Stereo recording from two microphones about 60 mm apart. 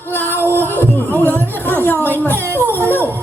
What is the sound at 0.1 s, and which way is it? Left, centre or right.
Music, left.